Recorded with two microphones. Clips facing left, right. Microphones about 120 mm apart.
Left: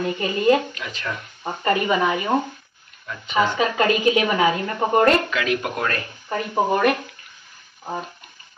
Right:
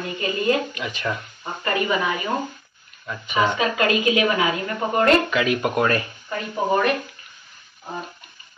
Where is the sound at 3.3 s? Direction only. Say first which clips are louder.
Left 1 dB; 35° left (ahead or behind).